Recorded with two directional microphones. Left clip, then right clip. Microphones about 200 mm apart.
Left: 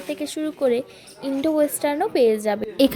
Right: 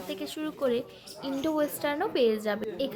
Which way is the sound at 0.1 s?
35° left (ahead or behind).